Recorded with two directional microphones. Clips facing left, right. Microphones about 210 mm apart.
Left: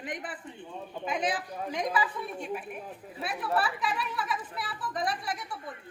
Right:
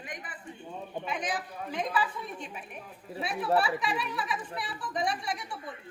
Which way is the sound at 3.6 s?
Centre (ahead or behind).